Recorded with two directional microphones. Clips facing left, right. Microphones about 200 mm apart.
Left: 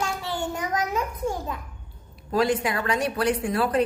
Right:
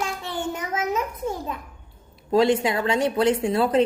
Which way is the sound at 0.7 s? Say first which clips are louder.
Right 1 dB; 25° right (ahead or behind).